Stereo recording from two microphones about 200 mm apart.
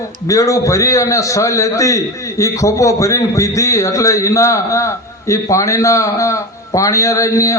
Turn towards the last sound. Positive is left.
turn(degrees=15)  # may be behind; listen again after turning